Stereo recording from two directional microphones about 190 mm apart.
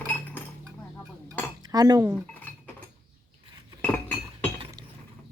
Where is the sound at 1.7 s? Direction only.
20° right (ahead or behind).